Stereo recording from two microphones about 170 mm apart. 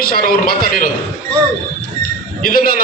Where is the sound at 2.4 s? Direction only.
60° left (ahead or behind).